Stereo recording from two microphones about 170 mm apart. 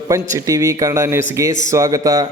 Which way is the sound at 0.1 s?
20° right (ahead or behind).